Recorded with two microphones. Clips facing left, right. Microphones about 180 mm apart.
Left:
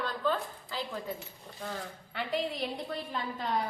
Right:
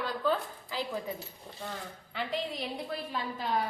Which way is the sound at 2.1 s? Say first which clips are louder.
Left 1 dB; centre (ahead or behind).